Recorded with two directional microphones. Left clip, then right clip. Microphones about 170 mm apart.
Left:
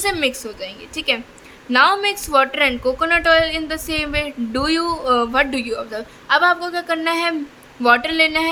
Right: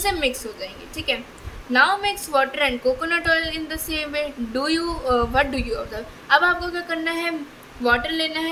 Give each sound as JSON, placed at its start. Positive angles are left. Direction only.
{"t": 0.0, "sound": "a woman's voice", "side_deg": 35}